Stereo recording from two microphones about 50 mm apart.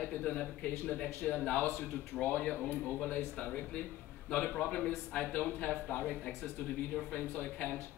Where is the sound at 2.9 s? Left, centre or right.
Left.